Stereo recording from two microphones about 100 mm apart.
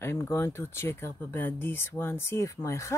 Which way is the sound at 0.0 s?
25° left (ahead or behind).